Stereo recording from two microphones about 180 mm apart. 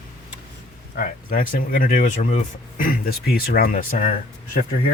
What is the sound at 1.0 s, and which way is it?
Speech, 50° left (ahead or behind).